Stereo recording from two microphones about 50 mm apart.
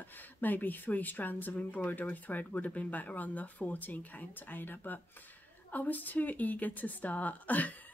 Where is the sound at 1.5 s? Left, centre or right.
Left.